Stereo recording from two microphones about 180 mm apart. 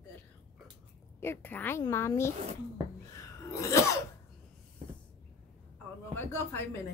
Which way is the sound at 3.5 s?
15° left (ahead or behind).